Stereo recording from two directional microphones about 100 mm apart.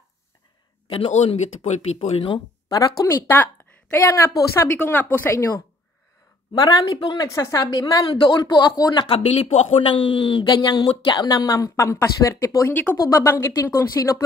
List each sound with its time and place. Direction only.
0.8 s speech: 70° left (ahead or behind); by 2.2 s 90° left
3.0 s speech: 35° left (ahead or behind)
3.9 s speech: 25° left (ahead or behind)
6.5 s speech: 40° left (ahead or behind)
7.2 s speech: 30° left (ahead or behind)
7.6 s speech: 40° left (ahead or behind)
9.0 s speech: 75° left (ahead or behind); by 14.1 s 35° left (ahead or behind)